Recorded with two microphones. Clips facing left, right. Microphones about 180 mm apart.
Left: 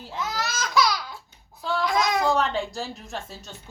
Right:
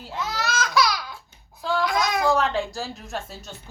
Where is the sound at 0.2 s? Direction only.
20° left (ahead or behind).